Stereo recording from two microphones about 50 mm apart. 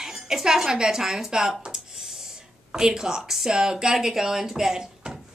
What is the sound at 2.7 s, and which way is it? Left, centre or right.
Speech, centre.